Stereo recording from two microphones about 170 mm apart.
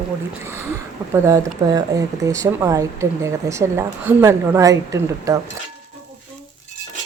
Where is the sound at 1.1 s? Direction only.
15° right (ahead or behind).